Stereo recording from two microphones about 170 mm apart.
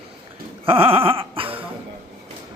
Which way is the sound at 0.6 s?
35° right (ahead or behind).